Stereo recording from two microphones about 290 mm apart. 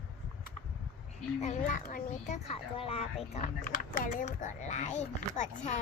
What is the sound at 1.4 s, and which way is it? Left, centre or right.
Speech, left.